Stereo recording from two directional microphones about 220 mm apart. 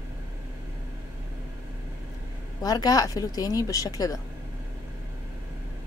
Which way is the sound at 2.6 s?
15° left (ahead or behind).